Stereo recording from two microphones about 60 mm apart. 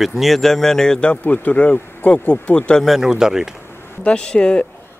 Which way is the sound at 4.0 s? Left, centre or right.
Centre.